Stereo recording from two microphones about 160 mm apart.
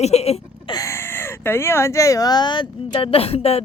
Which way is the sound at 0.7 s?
20° left (ahead or behind).